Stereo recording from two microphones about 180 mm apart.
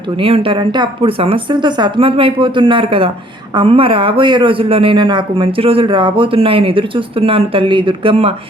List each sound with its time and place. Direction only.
0.2 s speech: 30° right (ahead or behind)